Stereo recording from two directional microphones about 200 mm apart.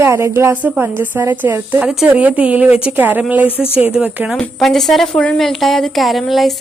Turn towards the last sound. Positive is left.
turn(degrees=0)  # may be behind; listen again after turning